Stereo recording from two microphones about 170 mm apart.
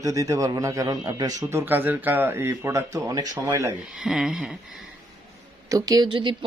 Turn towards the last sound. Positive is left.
turn(degrees=-30)  # may be behind; listen again after turning